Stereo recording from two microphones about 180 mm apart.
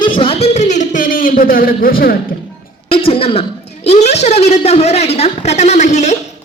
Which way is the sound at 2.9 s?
30° left (ahead or behind).